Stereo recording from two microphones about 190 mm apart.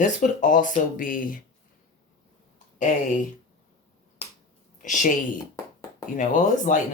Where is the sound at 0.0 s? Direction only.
45° left (ahead or behind).